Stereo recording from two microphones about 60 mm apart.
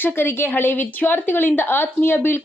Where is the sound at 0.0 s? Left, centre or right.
Left.